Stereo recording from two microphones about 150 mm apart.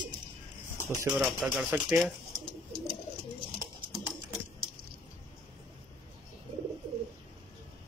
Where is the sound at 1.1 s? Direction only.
5° right (ahead or behind).